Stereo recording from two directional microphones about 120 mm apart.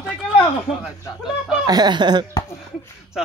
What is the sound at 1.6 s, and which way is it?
Speech, 35° right (ahead or behind).